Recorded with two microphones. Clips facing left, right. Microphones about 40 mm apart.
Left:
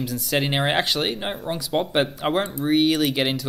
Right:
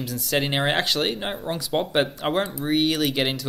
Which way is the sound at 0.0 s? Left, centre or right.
Centre.